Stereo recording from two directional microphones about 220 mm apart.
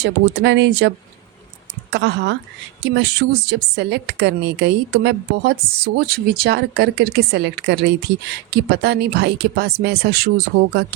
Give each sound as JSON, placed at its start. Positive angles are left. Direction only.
{"t": 0.0, "sound": "a woman's voice", "side_deg": -50}